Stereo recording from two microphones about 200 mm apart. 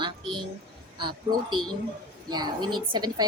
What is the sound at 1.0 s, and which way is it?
A woman's voice, 25° right (ahead or behind).